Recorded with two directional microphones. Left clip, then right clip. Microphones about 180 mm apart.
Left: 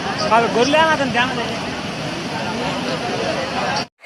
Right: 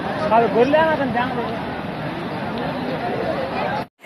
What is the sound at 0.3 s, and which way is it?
Speech, 25° right (ahead or behind).